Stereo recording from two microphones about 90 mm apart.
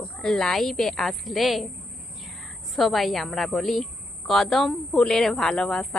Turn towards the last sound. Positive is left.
turn(degrees=5)  # may be behind; listen again after turning